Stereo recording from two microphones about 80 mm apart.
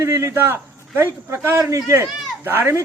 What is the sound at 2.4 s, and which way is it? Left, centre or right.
Speech, right.